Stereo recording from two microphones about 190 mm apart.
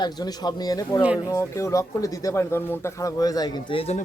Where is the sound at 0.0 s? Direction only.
20° left (ahead or behind).